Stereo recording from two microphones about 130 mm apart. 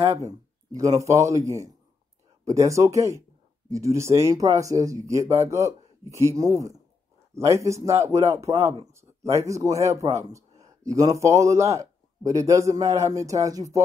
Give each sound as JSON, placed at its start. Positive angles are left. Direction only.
{"t": 0.2, "sound": "speech", "side_deg": -25}
{"t": 8.8, "sound": "a sound", "side_deg": -25}
{"t": 9.5, "sound": "speech", "side_deg": -25}